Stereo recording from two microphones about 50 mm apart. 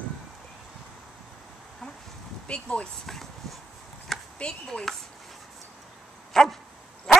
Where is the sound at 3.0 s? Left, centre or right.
Centre.